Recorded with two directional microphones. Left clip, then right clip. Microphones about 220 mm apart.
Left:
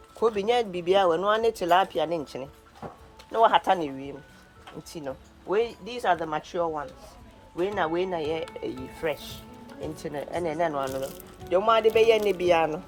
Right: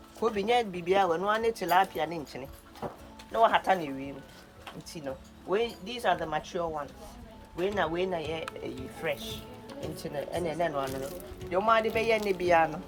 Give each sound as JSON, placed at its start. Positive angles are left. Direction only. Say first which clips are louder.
{"t": 0.2, "sound": "speech", "louder": "left 3 dB", "side_deg": 25}
{"t": 2.8, "sound": "speech", "louder": "right 2 dB", "side_deg": -45}
{"t": 3.3, "sound": "speech", "louder": "left 3 dB", "side_deg": 25}
{"t": 7.9, "sound": "speech", "louder": "left 4 dB", "side_deg": 20}
{"t": 11.5, "sound": "speech", "louder": "left 5 dB", "side_deg": 40}